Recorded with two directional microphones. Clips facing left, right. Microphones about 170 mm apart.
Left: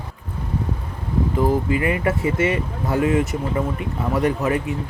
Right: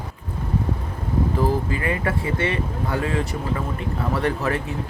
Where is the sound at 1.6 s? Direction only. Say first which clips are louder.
Left 4 dB; 20° left (ahead or behind).